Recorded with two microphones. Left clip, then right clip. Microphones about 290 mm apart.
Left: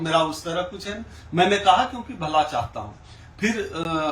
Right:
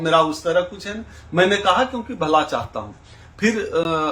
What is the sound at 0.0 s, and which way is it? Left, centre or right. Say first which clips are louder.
Speech: right 5 dB; centre.